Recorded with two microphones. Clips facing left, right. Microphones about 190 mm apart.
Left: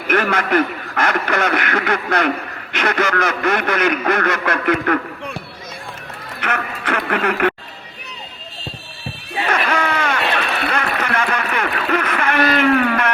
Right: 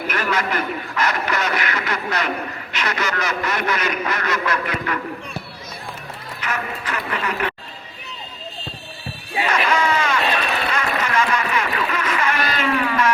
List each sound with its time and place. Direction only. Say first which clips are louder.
0.1 s speech: left 7 dB; 55° left (ahead or behind)
6.4 s speech: left 3 dB; 60° left (ahead or behind)
9.5 s a sound: even; 55° left (ahead or behind)